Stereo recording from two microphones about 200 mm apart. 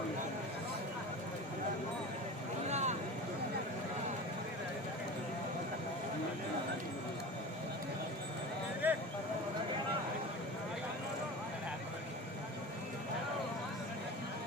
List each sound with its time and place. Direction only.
2.6 s vehicle: 35° right (ahead or behind)
8.8 s clip-clop: 10° right (ahead or behind)